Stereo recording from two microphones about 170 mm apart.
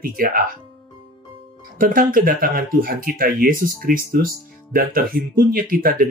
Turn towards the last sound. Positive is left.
turn(degrees=-55)  # may be behind; listen again after turning